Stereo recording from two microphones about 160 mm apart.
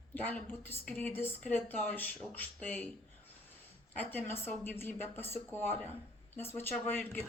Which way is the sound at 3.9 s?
10° left (ahead or behind).